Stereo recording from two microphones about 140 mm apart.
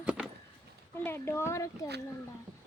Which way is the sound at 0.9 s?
15° left (ahead or behind).